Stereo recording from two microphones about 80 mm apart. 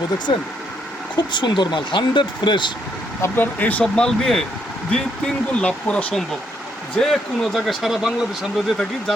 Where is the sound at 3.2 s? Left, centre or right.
Left.